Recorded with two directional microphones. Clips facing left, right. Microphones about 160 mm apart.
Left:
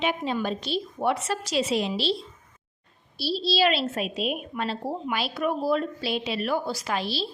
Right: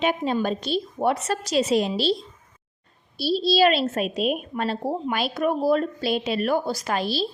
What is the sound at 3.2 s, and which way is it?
A woman's voice, 45° right (ahead or behind).